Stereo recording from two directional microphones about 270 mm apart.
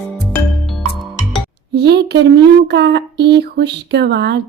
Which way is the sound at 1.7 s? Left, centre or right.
Right.